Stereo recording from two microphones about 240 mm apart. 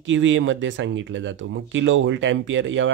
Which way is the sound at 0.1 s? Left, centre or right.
Right.